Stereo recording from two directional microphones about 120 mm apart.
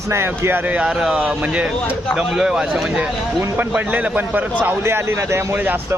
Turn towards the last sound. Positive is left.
turn(degrees=-20)  # may be behind; listen again after turning